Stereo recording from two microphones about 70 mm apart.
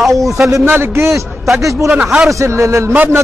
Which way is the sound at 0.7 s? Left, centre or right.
Right.